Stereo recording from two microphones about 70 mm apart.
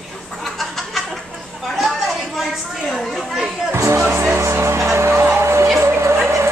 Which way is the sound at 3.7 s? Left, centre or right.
Right.